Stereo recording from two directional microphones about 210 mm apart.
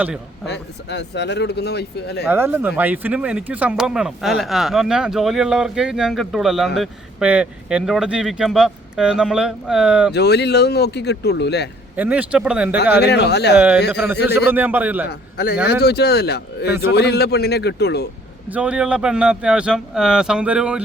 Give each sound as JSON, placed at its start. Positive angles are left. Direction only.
{"t": 0.4, "sound": "speech", "side_deg": 55}
{"t": 2.3, "sound": "speech", "side_deg": -10}
{"t": 10.1, "sound": "speech", "side_deg": 50}
{"t": 11.9, "sound": "speech", "side_deg": -5}
{"t": 13.0, "sound": "speech", "side_deg": 50}
{"t": 14.3, "sound": "speech", "side_deg": -10}
{"t": 15.0, "sound": "speech", "side_deg": 50}
{"t": 18.4, "sound": "speech", "side_deg": -5}